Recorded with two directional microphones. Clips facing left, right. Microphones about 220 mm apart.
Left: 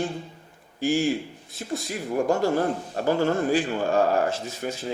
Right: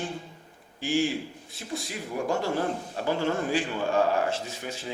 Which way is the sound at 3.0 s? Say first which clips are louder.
Left 5 dB; 45° left (ahead or behind).